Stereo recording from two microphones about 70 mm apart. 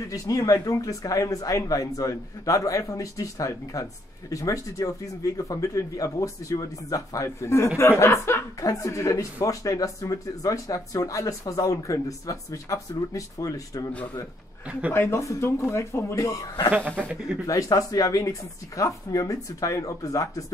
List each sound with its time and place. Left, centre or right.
0.1 s speech: left
8.5 s speech: left
14.9 s speech: left
16.7 s speech: right
17.5 s speech: left